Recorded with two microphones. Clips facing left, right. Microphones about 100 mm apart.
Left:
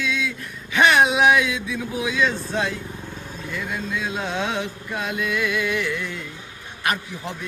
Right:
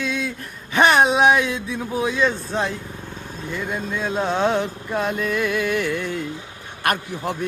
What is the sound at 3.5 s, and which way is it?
Speech, 40° right (ahead or behind).